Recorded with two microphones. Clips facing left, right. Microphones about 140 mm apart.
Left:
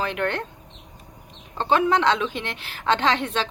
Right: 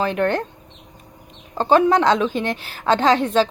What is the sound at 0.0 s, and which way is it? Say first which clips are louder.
Speech: right 6 dB; 35° right (ahead or behind).